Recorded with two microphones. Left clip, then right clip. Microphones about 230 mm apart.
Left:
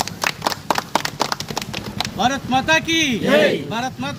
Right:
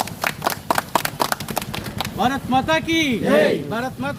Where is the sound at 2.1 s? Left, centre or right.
Left.